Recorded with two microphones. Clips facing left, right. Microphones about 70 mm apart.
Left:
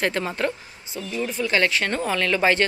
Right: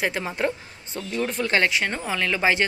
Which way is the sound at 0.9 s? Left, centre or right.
Right.